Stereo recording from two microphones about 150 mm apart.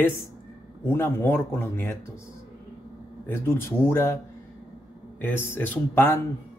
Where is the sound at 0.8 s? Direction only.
15° left (ahead or behind).